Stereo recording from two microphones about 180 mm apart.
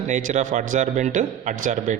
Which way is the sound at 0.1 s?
45° right (ahead or behind).